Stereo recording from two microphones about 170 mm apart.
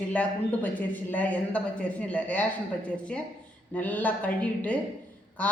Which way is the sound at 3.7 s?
10° left (ahead or behind).